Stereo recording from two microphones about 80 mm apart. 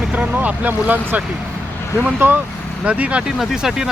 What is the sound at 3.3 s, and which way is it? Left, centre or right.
Speech, centre.